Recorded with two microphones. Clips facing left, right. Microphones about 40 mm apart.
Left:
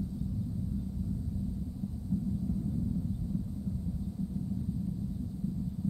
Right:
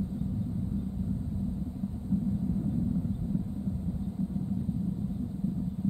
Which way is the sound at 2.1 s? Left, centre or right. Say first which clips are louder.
Right 4 dB; right.